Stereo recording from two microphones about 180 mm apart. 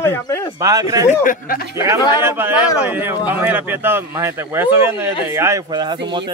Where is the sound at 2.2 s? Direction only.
10° right (ahead or behind).